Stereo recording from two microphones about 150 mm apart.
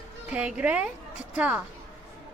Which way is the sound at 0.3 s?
5° right (ahead or behind).